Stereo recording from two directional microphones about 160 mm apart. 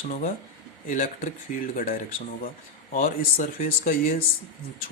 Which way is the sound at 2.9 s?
60° left (ahead or behind).